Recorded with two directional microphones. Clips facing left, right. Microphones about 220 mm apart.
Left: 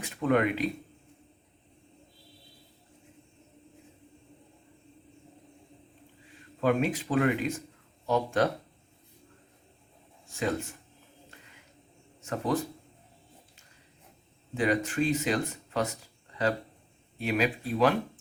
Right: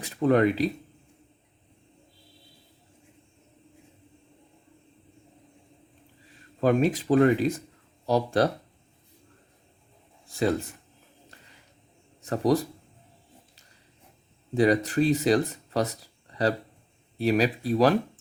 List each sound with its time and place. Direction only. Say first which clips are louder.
0.0 s speech: right 5 dB; 35° right (ahead or behind)
6.6 s speech: right 4 dB; 40° right (ahead or behind)
10.2 s a sound: right 5 dB; 35° right (ahead or behind)
12.2 s speech: right 6 dB; 35° right (ahead or behind)
14.5 s speech: right 6 dB; 35° right (ahead or behind)